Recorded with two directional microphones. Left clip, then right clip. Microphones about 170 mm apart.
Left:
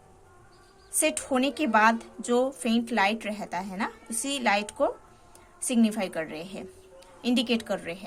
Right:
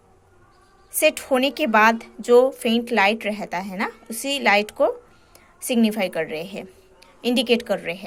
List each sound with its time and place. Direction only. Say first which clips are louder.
0.9 s a woman's voice: right 7 dB; 35° right (ahead or behind)